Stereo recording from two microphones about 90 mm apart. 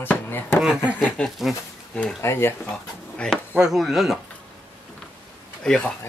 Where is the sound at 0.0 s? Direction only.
25° left (ahead or behind).